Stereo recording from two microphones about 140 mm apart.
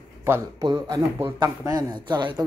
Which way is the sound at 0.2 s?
15° right (ahead or behind).